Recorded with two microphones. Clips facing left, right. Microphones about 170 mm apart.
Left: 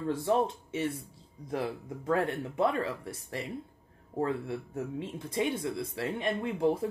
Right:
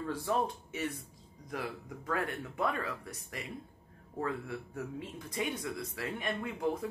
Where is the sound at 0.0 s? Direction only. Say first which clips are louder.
Left 5 dB; 25° left (ahead or behind).